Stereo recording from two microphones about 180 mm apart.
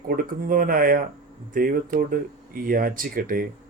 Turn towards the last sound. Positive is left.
turn(degrees=-55)  # may be behind; listen again after turning